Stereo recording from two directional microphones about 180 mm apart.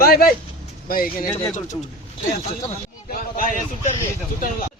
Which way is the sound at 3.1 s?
50° left (ahead or behind).